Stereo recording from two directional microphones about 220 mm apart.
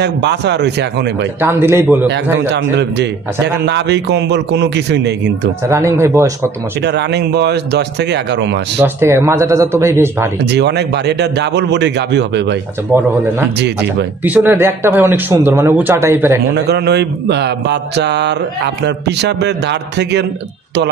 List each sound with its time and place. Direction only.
0.0 s speech: 50° right (ahead or behind)
1.4 s speech: 10° right (ahead or behind)
2.5 s speech: 50° right (ahead or behind)
5.7 s speech: 10° right (ahead or behind)
6.9 s speech: 50° right (ahead or behind)
8.8 s speech: 10° right (ahead or behind)
10.5 s speech: 50° right (ahead or behind)
14.2 s speech: 10° right (ahead or behind)
16.5 s speech: 50° right (ahead or behind)